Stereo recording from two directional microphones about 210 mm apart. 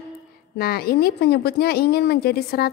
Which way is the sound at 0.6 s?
45° left (ahead or behind).